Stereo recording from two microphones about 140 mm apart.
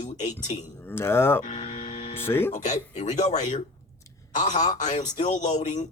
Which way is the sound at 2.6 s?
55° left (ahead or behind).